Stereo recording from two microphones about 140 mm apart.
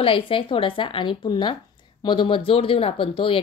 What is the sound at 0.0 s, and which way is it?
A woman's voice, 40° left (ahead or behind).